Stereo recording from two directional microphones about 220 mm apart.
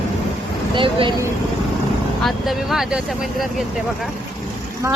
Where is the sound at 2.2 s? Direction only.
Centre (ahead or behind).